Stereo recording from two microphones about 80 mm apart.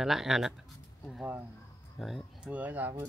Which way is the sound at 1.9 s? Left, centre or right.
Centre.